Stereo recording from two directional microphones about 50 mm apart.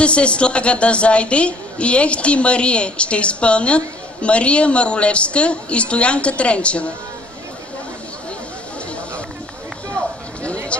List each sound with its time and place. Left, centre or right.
0.0 s a woman's voice: left
10.7 s speech: left